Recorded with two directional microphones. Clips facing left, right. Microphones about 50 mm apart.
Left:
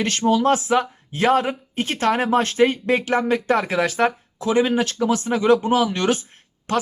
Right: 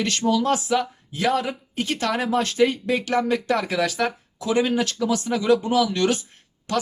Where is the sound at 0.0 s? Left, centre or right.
Left.